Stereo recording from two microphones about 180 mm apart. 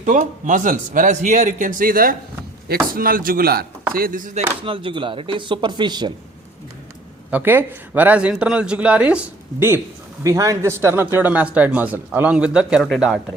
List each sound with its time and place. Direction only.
0.0 s speech: 45° right (ahead or behind)
4.6 s speech: 30° right (ahead or behind)
7.3 s speech: 10° right (ahead or behind)